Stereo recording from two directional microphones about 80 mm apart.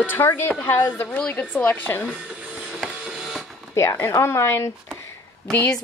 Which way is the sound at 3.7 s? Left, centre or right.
Left.